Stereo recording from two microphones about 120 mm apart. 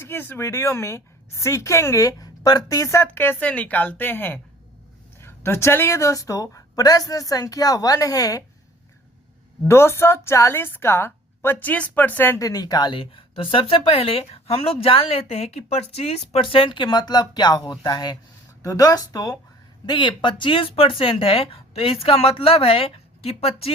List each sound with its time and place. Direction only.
0.0 s a woman's voice: 20° left (ahead or behind)
9.6 s a woman's voice: 20° left (ahead or behind)
12.4 s a woman's voice: 30° left (ahead or behind)
19.8 s a woman's voice: 40° left (ahead or behind)